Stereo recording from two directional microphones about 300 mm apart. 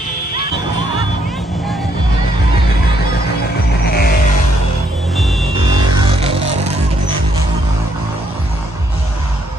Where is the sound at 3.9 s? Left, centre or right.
Left.